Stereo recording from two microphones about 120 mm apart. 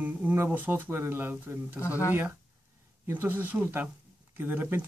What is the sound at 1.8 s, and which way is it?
Speech, 25° left (ahead or behind).